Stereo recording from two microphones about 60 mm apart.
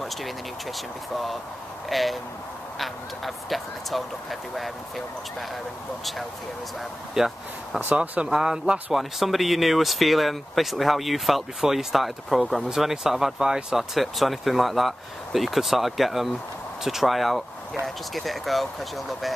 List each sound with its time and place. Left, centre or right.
1.1 s speech: centre
7.2 s speech: centre
7.9 s speech: right
8.3 s speech: centre